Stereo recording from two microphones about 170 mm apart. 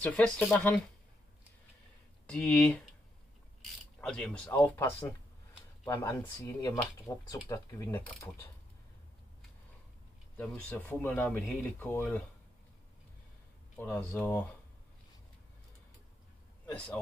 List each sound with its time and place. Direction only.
0.0 s speech: 10° left (ahead or behind)
2.2 s speech: 5° left (ahead or behind)
4.0 s speech: 5° left (ahead or behind)
10.3 s speech: 10° left (ahead or behind)
13.7 s speech: 10° left (ahead or behind)
16.7 s speech: 5° left (ahead or behind)